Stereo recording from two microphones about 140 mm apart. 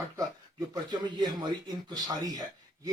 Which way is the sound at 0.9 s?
30° right (ahead or behind).